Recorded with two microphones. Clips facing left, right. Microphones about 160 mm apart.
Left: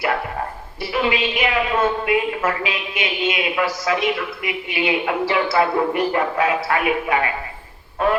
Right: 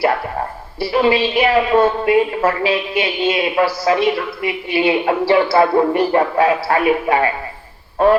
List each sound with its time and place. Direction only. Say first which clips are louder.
0.8 s a woman's voice: right 6 dB; 35° right (ahead or behind)